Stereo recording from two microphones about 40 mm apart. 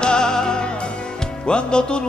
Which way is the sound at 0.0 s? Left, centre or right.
Centre.